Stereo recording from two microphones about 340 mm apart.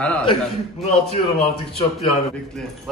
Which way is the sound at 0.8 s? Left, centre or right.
Centre.